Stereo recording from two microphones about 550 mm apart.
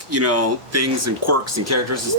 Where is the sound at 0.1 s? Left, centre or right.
Right.